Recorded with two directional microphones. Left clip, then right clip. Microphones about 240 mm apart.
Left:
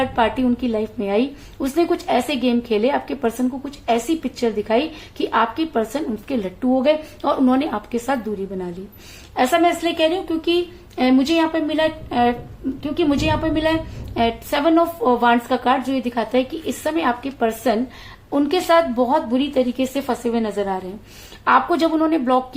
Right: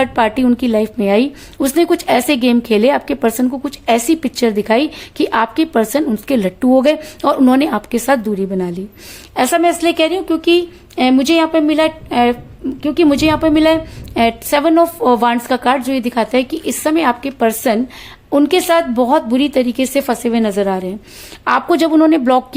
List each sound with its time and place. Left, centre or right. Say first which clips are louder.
0.0 s a woman's voice: right 5 dB; right